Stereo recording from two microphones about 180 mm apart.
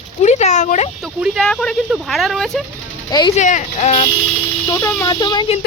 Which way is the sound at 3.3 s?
40° left (ahead or behind).